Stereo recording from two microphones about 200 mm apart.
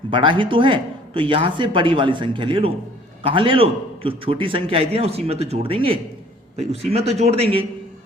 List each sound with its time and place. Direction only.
0.1 s a man's voice: 25° right (ahead or behind)